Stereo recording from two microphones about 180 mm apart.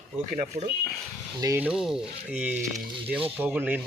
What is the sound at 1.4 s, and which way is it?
Speech, 20° right (ahead or behind).